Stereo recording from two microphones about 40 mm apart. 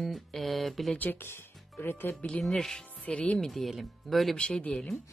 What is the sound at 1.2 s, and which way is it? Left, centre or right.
Music, left.